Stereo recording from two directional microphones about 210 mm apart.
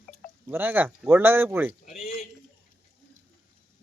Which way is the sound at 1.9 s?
35° left (ahead or behind).